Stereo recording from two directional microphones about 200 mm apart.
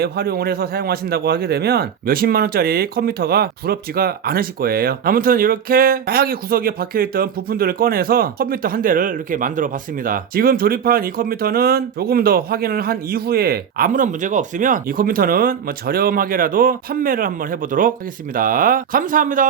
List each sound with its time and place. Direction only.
0.0 s a man's voice: 50° right (ahead or behind)